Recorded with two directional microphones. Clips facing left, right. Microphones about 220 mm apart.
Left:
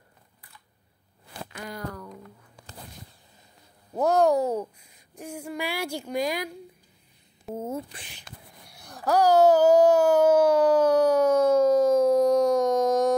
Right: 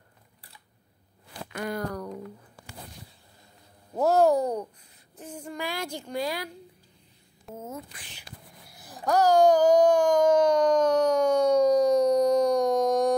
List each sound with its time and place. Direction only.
1.6 s speech: 55° right (ahead or behind)
3.9 s a child's voice: 5° right (ahead or behind); by 6.5 s 15° left (ahead or behind)
7.5 s speech: 30° left (ahead or behind)
8.6 s a sound: centre (ahead or behind)